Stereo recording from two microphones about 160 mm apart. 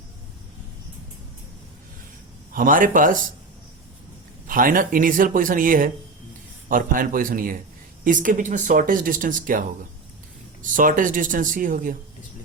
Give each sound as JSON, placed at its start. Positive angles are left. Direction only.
{"t": 2.5, "sound": "speech", "side_deg": -60}
{"t": 4.4, "sound": "speech", "side_deg": -60}